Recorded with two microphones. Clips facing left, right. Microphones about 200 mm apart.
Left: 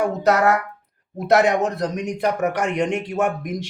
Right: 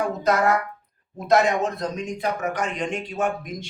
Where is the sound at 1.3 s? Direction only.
70° left (ahead or behind).